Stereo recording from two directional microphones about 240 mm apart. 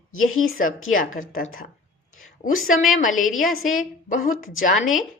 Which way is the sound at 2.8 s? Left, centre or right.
Left.